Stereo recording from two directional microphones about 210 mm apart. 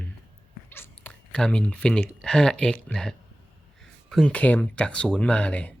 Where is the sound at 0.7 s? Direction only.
10° left (ahead or behind).